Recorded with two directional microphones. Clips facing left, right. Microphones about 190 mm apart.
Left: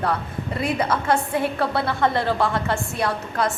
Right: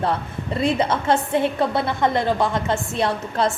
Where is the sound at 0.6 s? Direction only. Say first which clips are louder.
Right 2 dB; 25° right (ahead or behind).